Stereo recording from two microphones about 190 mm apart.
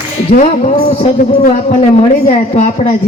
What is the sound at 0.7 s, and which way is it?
A woman's voice, 30° left (ahead or behind).